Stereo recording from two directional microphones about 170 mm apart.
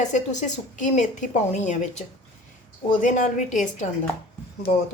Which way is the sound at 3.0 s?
45° left (ahead or behind).